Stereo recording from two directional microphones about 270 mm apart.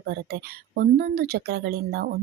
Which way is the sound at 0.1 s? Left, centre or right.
Right.